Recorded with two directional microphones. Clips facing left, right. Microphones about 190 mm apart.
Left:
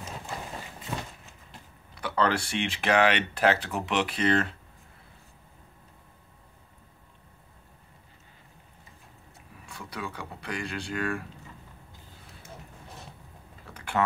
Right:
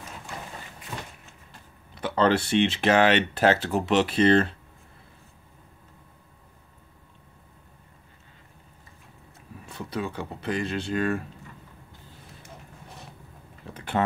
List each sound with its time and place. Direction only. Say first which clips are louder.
2.0 s speech: right 4 dB; 25° right (ahead or behind)
9.7 s speech: right 6 dB; 25° right (ahead or behind)
13.7 s a sound: right 2 dB; 25° right (ahead or behind)